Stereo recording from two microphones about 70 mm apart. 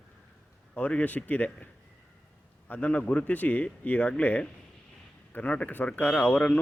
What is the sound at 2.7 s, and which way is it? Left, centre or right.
Speech, left.